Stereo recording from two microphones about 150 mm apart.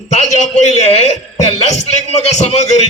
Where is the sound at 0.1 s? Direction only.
50° left (ahead or behind).